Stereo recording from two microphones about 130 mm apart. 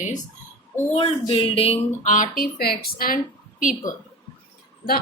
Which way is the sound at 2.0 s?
85° left.